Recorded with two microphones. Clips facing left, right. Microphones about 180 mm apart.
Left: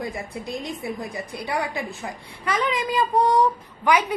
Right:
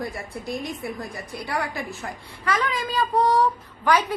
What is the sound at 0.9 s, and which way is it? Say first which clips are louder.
A woman's voice: left 2 dB; 15° left (ahead or behind).